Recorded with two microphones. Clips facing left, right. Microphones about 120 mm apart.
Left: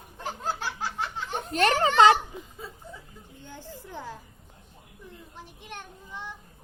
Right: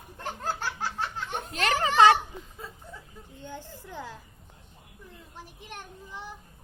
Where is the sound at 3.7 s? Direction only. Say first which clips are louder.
Left 1 dB; 15° left (ahead or behind).